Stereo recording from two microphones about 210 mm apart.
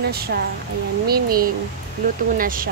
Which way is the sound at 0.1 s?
45° right (ahead or behind).